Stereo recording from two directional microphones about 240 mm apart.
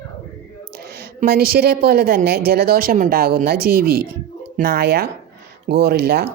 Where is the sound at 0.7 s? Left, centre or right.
Right.